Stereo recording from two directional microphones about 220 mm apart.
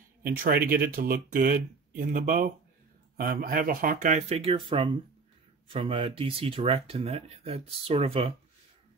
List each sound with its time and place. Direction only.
0.2 s speech: 40° right (ahead or behind); by 8.3 s 25° right (ahead or behind)